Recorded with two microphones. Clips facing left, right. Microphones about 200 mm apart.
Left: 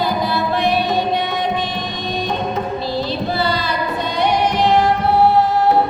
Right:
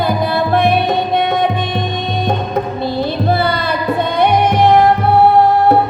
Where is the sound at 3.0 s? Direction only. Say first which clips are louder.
Right 6 dB; 55° right (ahead or behind).